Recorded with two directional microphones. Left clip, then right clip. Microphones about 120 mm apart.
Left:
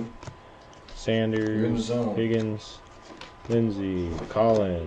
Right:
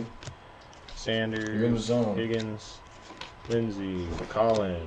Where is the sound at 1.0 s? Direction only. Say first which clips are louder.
Left 4 dB; 5° left (ahead or behind).